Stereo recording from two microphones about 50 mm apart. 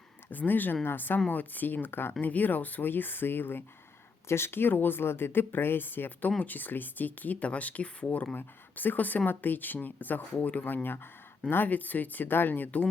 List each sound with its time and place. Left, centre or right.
0.3 s speech: left
8.4 s speech: left
11.4 s speech: left